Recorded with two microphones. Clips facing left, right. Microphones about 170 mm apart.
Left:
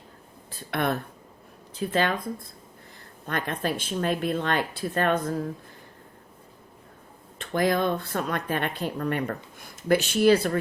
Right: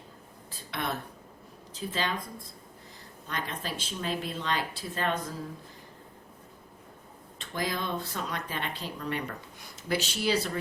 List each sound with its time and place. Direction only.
0.7 s speech: 55° left (ahead or behind)
3.2 s speech: 55° left (ahead or behind)
7.3 s speech: 55° left (ahead or behind)